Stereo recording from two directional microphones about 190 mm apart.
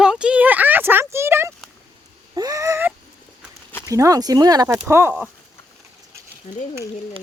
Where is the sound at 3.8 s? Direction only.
15° right (ahead or behind).